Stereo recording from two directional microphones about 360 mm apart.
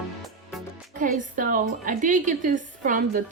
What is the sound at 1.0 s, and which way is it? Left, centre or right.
A woman's voice, right.